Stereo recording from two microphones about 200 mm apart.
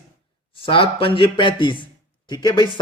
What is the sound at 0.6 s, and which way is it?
Speech, 25° left (ahead or behind).